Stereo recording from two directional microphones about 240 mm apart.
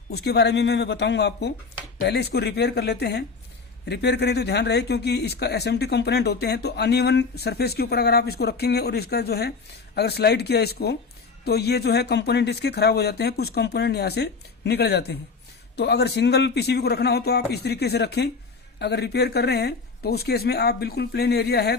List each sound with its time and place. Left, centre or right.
0.1 s speech: left